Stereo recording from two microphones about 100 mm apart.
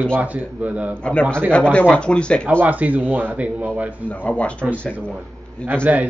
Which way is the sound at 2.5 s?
15° right (ahead or behind).